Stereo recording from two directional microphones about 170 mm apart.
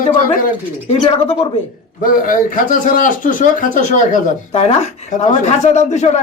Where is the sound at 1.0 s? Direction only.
35° left (ahead or behind).